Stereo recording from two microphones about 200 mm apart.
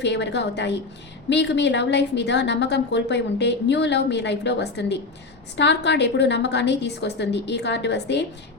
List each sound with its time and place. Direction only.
0.0 s a woman's voice: 60° left (ahead or behind)